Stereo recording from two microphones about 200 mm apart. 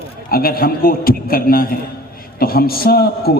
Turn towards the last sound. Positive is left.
turn(degrees=50)  # may be behind; listen again after turning